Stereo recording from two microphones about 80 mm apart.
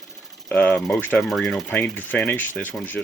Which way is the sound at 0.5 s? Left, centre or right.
Centre.